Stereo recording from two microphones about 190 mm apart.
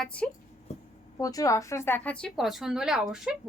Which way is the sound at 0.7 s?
35° left (ahead or behind).